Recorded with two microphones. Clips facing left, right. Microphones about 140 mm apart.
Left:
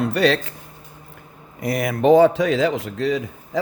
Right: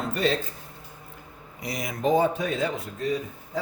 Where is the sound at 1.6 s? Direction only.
60° left (ahead or behind); by 3.6 s 90° left.